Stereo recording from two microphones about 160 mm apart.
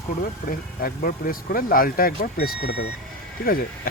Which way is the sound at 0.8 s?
65° left (ahead or behind).